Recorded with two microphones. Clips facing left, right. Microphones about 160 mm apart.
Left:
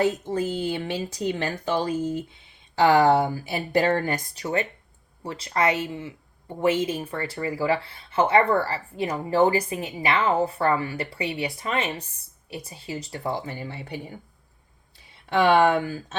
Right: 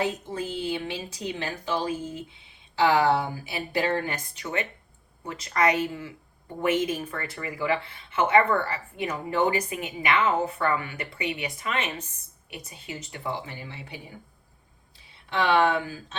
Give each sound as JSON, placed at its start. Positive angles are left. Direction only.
{"t": 0.0, "sound": "speech", "side_deg": 40}
{"t": 15.3, "sound": "speech", "side_deg": 50}